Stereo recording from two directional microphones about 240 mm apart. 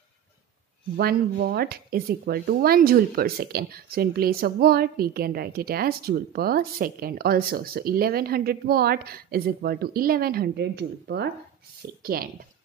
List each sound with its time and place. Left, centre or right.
0.9 s speech: right